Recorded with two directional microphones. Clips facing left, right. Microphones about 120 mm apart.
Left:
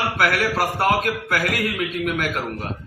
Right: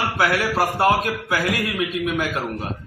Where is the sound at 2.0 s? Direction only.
20° right (ahead or behind).